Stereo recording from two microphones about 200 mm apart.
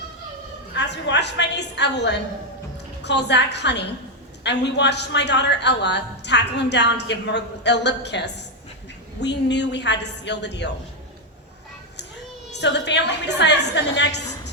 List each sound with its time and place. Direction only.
0.8 s a woman's voice: 60° left (ahead or behind)
12.5 s a woman's voice: 60° left (ahead or behind)